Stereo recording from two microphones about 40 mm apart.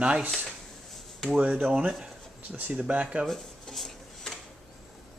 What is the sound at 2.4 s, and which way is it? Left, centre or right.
Speech, right.